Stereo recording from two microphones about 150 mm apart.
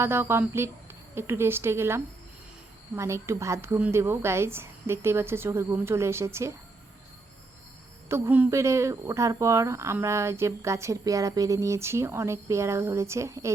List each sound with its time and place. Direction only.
0.0 s speech: 15° right (ahead or behind)
8.1 s speech: 15° right (ahead or behind)